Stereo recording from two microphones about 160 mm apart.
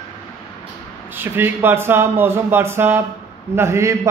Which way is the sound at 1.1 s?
15° right (ahead or behind).